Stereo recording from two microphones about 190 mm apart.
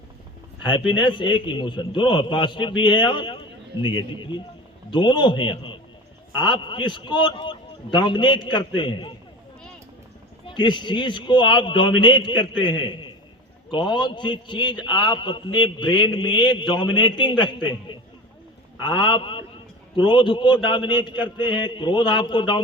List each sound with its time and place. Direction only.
0.6 s a man's voice: 25° left (ahead or behind)
10.4 s a man's voice: 25° left (ahead or behind)